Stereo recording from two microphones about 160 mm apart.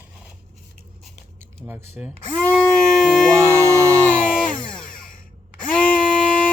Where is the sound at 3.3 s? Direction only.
15° right (ahead or behind).